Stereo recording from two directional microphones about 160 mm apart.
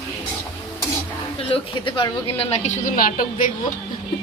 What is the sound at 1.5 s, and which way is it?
A woman's voice, 30° left (ahead or behind).